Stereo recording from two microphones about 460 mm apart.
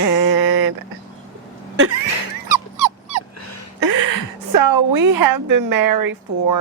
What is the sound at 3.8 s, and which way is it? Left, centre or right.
A woman's voice, right.